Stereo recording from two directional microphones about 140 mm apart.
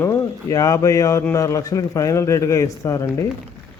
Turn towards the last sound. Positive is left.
turn(degrees=20)  # may be behind; listen again after turning